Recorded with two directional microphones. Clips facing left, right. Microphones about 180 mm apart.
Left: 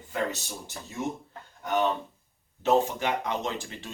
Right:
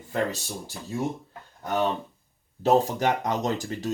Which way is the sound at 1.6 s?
35° right (ahead or behind).